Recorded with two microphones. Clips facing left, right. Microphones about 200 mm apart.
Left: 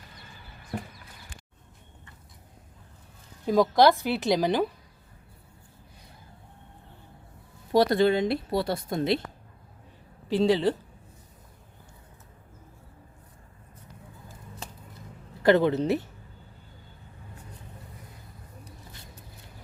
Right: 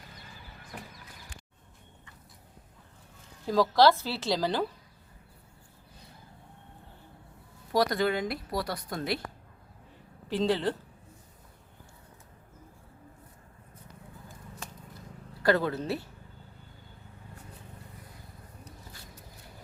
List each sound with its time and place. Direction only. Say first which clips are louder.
3.4 s a woman's voice: left 2 dB; 20° left (ahead or behind)
7.7 s speech: left 6 dB; 25° left (ahead or behind)
10.2 s a woman's voice: left 5 dB; 15° left (ahead or behind)
15.4 s speech: left 6 dB; 20° left (ahead or behind)